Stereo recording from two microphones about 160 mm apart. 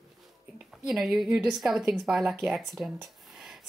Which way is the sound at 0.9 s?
Centre (ahead or behind).